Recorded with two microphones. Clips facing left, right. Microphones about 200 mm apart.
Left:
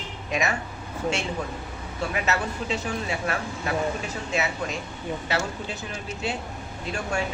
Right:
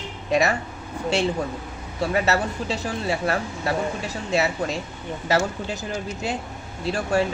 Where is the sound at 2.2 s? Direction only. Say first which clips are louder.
Right 4 dB; 35° right (ahead or behind).